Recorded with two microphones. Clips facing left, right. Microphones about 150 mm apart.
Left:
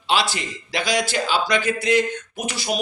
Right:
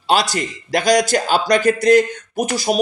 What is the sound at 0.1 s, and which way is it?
A man's voice, 45° right (ahead or behind).